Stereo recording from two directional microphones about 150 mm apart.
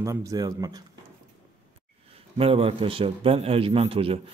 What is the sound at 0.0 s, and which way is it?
Speech, 20° right (ahead or behind).